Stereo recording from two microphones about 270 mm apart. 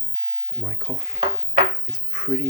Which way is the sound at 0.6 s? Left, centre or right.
Centre.